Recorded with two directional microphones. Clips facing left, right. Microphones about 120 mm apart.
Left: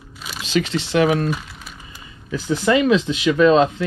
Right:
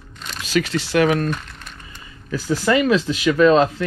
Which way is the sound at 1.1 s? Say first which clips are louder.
Left 1 dB; 5° left (ahead or behind).